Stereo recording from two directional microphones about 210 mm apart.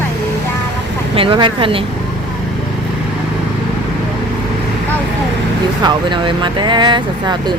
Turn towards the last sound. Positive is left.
turn(degrees=-20)  # may be behind; listen again after turning